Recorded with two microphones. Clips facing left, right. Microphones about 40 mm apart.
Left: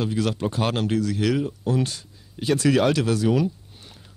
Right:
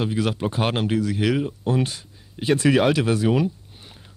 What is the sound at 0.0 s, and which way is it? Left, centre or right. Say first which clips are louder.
Speech: right 1 dB; right.